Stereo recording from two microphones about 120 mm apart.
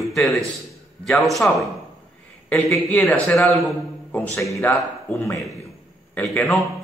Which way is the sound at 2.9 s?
15° left (ahead or behind).